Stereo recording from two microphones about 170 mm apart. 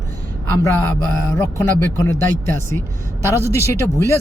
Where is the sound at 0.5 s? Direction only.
15° left (ahead or behind).